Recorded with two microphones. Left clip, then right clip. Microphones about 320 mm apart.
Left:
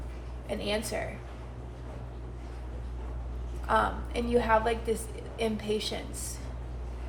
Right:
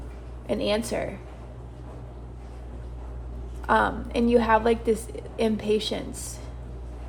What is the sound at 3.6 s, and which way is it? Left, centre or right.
A woman's voice, right.